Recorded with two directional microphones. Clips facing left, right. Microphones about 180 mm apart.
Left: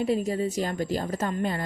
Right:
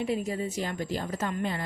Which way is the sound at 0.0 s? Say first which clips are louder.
Left 4 dB; 40° left (ahead or behind).